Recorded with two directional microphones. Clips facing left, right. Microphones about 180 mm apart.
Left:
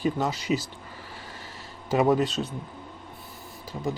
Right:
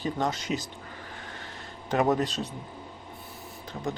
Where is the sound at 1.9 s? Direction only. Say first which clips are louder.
Left 3 dB; 5° left (ahead or behind).